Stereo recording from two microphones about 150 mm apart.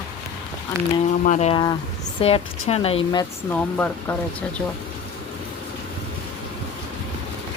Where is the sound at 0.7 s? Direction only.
20° right (ahead or behind).